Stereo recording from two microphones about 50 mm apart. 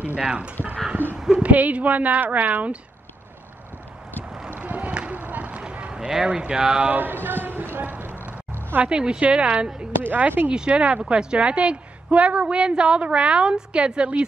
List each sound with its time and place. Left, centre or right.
0.2 s a woman's voice: right
1.1 s a woman's voice: centre
1.4 s a woman's voice: right
4.5 s a sound: right
5.9 s a sound: centre
6.2 s speech: centre
6.9 s a woman's voice: right
7.2 s clip-clop: right
8.8 s a woman's voice: centre
10.0 s a woman's voice: right
10.5 s a woman's voice: centre